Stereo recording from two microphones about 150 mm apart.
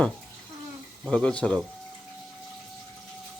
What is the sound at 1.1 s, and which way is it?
Speech, 5° left (ahead or behind).